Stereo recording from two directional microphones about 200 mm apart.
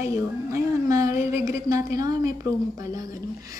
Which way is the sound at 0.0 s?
15° right (ahead or behind).